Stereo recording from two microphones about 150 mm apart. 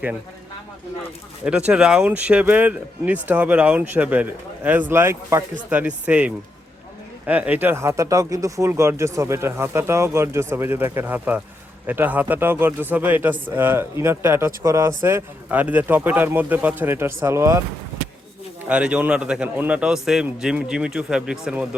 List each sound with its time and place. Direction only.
1.5 s speech: 5° right (ahead or behind)
18.7 s a man's voice: 5° right (ahead or behind)